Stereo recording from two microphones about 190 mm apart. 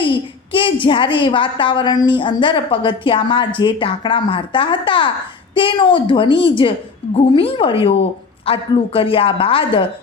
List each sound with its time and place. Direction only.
0.0 s a woman's voice: 25° left (ahead or behind)